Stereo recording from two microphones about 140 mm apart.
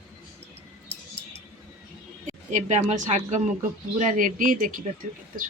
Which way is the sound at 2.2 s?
60° right (ahead or behind).